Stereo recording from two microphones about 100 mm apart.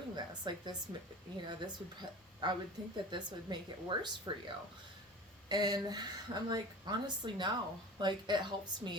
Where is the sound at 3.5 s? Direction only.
45° right (ahead or behind).